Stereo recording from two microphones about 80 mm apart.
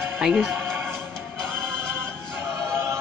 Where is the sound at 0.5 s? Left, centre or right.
Right.